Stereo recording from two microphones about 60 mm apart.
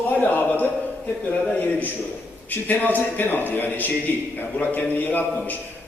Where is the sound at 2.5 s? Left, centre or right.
Left.